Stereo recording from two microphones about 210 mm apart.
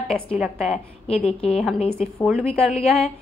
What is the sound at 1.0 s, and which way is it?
Speech, 30° left (ahead or behind).